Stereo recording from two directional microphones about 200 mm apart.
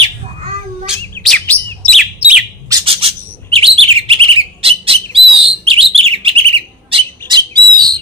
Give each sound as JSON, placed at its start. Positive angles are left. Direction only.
{"t": 0.8, "sound": "bird", "side_deg": 0}
{"t": 2.7, "sound": "bird", "side_deg": -30}